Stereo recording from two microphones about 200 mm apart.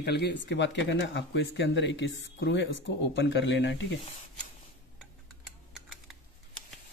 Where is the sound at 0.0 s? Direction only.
55° left (ahead or behind).